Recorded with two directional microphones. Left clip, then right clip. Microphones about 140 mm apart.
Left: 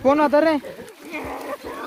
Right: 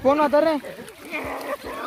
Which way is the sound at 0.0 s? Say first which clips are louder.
Left 1 dB; 25° left (ahead or behind).